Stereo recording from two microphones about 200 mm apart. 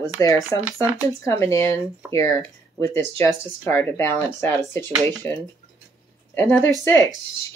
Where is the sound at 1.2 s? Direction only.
15° left (ahead or behind).